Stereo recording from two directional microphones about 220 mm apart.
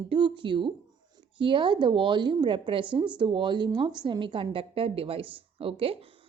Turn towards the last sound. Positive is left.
turn(degrees=-25)  # may be behind; listen again after turning